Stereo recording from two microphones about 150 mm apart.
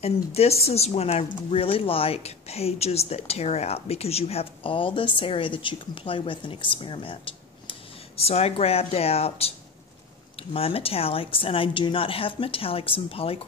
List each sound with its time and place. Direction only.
0.0 s speech: 45° left (ahead or behind)
8.2 s speech: 40° left (ahead or behind)
10.5 s speech: 40° left (ahead or behind)